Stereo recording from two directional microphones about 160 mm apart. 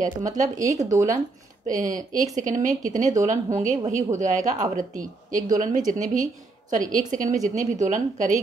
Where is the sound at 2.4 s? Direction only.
55° right (ahead or behind).